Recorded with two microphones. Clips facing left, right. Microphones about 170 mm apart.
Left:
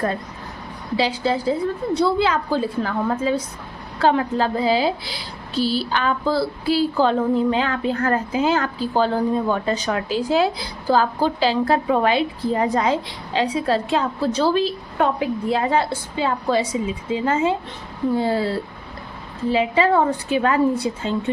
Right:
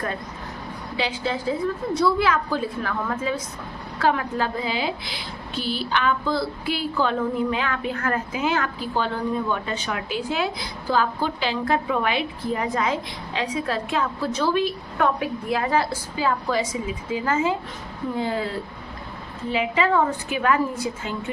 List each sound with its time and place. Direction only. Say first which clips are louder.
0.9 s a woman's voice: left 6 dB; 35° left (ahead or behind)